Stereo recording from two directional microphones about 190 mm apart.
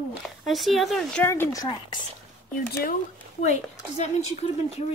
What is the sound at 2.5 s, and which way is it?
Speech, 50° left (ahead or behind).